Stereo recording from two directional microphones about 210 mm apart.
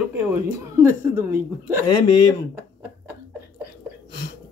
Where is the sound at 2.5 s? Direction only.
10° right (ahead or behind).